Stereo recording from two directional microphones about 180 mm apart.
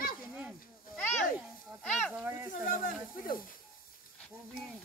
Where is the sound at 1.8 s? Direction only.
5° left (ahead or behind).